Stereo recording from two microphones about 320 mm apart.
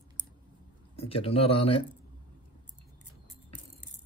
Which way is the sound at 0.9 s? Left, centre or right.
Centre.